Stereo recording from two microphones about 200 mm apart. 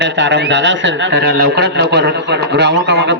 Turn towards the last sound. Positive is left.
turn(degrees=-60)  # may be behind; listen again after turning